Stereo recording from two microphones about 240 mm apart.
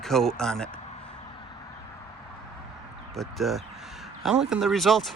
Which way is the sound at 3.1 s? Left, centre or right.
Centre.